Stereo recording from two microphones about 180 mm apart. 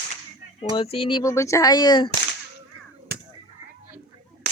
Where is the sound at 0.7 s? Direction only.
30° left (ahead or behind).